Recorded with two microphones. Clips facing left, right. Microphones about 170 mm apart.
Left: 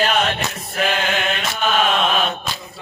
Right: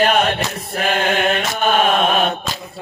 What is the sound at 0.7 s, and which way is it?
Mantra, 45° right (ahead or behind).